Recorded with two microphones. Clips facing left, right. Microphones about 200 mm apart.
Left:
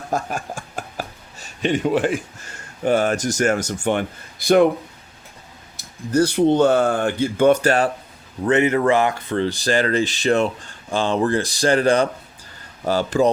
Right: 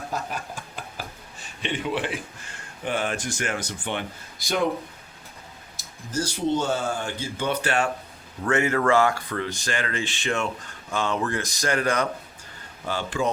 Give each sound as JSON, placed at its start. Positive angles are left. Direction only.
{"t": 0.1, "sound": "speech", "side_deg": 45}
{"t": 5.7, "sound": "speech", "side_deg": 60}
{"t": 8.4, "sound": "speech", "side_deg": 20}